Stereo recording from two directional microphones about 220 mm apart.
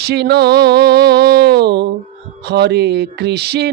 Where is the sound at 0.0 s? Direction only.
50° right (ahead or behind).